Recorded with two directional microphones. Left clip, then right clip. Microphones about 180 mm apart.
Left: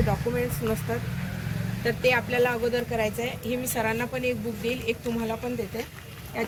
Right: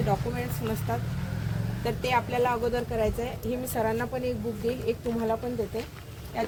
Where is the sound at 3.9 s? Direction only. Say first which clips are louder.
Left 2 dB; 45° right (ahead or behind).